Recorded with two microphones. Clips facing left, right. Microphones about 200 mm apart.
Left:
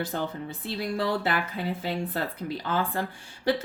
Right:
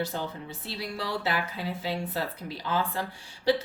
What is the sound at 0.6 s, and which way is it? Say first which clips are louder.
Speech: left 7 dB; 50° left (ahead or behind).